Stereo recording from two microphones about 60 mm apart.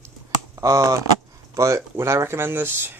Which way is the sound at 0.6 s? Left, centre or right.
Right.